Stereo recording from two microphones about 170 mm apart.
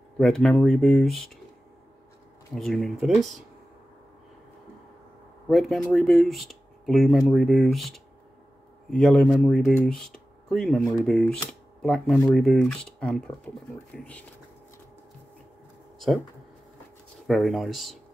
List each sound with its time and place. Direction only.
0.2 s speech: 5° left (ahead or behind)
2.5 s speech: centre (ahead or behind)
5.5 s speech: centre (ahead or behind)
17.3 s speech: centre (ahead or behind)